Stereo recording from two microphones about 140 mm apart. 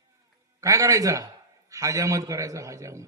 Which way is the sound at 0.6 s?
20° right (ahead or behind).